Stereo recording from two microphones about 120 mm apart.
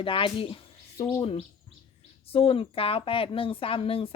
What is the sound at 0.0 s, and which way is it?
Speech, 45° left (ahead or behind).